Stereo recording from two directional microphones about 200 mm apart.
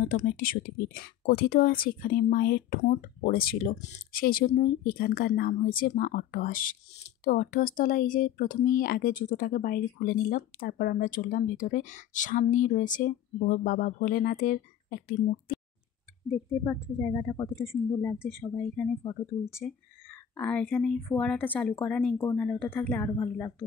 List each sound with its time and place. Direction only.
0.1 s speech: 45° left (ahead or behind)
16.4 s speech: 15° left (ahead or behind)